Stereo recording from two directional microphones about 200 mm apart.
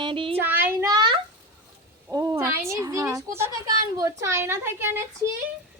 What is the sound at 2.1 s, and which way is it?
Speech, 15° right (ahead or behind).